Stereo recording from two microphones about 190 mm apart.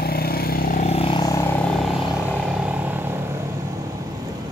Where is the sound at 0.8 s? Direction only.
30° left (ahead or behind).